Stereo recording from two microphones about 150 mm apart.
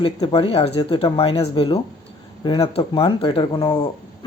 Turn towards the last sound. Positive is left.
turn(degrees=35)  # may be behind; listen again after turning